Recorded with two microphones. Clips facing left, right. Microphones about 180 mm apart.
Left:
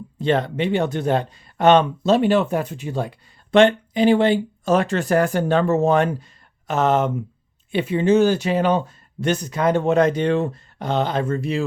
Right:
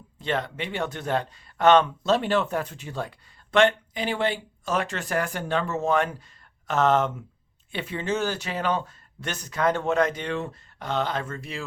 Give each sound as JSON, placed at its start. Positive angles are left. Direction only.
{"t": 0.2, "sound": "speech", "side_deg": 30}
{"t": 6.7, "sound": "speech", "side_deg": 10}
{"t": 10.8, "sound": "speech", "side_deg": 15}